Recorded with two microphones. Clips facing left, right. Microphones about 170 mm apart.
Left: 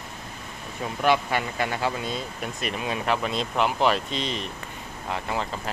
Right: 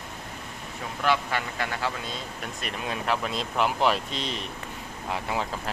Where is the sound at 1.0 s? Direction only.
15° left (ahead or behind).